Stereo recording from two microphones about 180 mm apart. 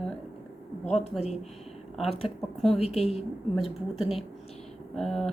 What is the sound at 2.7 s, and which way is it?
Speech, 35° left (ahead or behind).